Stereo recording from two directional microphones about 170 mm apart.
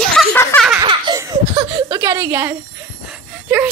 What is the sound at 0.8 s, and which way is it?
Baby laughter, 20° right (ahead or behind).